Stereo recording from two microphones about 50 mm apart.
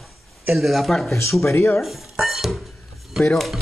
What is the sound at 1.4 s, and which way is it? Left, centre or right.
Speech, left.